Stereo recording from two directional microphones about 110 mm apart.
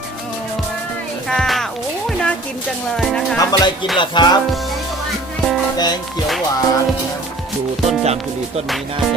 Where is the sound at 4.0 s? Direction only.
40° left (ahead or behind).